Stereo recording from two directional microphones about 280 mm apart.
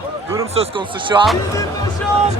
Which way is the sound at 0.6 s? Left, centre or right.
Centre.